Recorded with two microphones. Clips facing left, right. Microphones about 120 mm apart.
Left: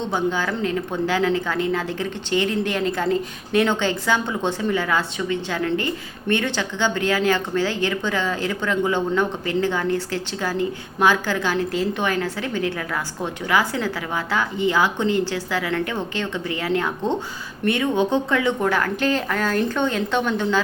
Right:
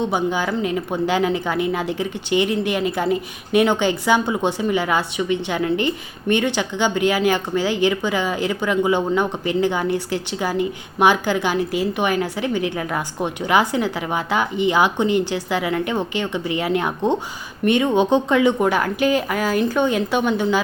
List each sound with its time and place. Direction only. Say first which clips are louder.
0.0 s speech: right 2 dB; 15° right (ahead or behind)